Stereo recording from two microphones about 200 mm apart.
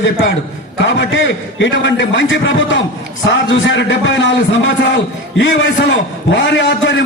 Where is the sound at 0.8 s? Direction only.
65° left (ahead or behind).